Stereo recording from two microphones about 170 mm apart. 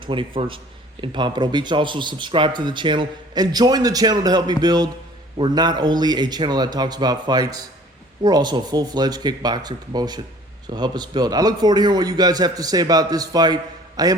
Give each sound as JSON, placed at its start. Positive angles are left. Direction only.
{"t": 0.0, "sound": "speech", "side_deg": -30}